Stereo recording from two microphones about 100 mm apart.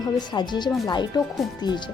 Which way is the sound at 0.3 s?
50° left (ahead or behind).